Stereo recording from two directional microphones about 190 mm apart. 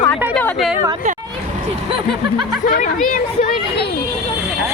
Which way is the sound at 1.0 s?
40° right (ahead or behind).